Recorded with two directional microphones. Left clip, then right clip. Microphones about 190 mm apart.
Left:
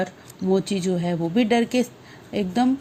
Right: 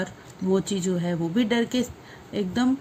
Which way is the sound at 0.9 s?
15° left (ahead or behind).